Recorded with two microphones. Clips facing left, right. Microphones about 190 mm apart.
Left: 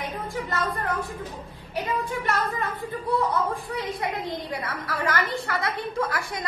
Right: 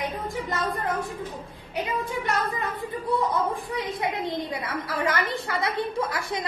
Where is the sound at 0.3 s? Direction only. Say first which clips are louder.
Even; 15° right (ahead or behind).